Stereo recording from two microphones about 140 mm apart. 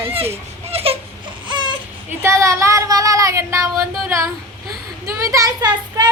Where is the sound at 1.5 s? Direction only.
35° right (ahead or behind).